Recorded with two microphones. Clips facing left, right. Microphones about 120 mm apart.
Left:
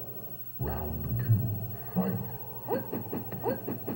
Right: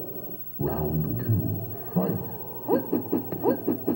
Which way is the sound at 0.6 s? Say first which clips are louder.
Right 9 dB; 25° right (ahead or behind).